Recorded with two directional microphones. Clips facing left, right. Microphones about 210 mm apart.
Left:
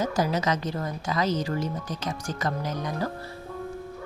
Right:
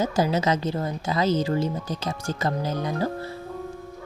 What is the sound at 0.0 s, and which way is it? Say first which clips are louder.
Speech: right 3 dB; 25° right (ahead or behind).